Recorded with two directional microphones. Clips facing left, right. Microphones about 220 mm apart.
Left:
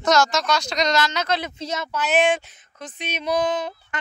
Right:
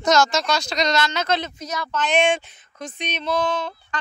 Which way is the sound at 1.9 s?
5° left (ahead or behind).